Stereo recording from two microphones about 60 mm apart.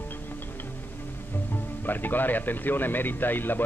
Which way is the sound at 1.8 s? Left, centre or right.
Left.